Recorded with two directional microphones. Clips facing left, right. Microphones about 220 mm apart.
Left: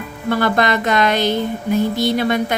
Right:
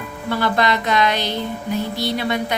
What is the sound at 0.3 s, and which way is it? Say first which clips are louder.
A woman's voice: left 3 dB; 50° left (ahead or behind).